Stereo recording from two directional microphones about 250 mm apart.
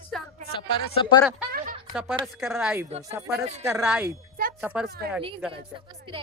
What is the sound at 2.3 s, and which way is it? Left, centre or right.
Speech, centre.